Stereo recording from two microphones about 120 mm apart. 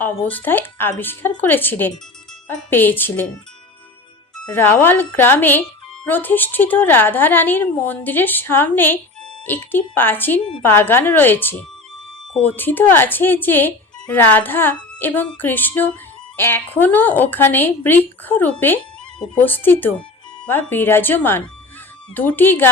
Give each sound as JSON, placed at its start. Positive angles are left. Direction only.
{"t": 0.0, "sound": "speech", "side_deg": 15}
{"t": 4.4, "sound": "speech", "side_deg": 15}